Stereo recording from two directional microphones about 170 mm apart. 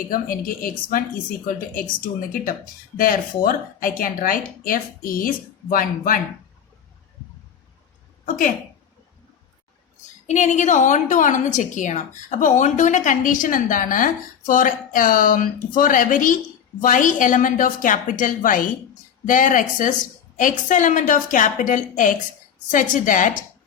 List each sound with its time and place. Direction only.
0.1 s speech: 55° left (ahead or behind)
8.2 s a woman's voice: 50° left (ahead or behind)
10.2 s a woman's voice: 45° left (ahead or behind)